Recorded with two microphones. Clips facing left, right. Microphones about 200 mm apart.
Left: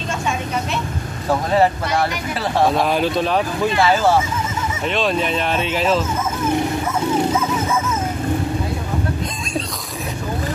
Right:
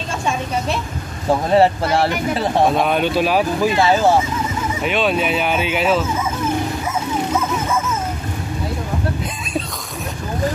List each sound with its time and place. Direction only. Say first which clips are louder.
1.5 s speech: right 3 dB; 30° right (ahead or behind)
2.6 s speech: left 1 dB; centre (ahead or behind)
3.7 s speech: even; 20° right (ahead or behind)
4.8 s speech: right 1 dB; 5° right (ahead or behind)